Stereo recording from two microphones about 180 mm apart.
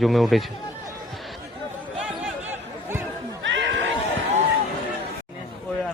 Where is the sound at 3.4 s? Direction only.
90° right.